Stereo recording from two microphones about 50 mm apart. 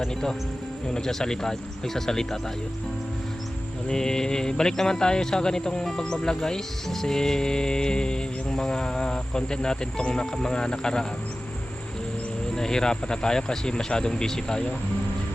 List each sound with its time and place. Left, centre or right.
0.0 s speech: centre
3.9 s speech: centre
12.5 s speech: centre